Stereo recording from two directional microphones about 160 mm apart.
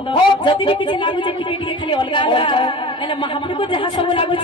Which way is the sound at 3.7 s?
30° left (ahead or behind).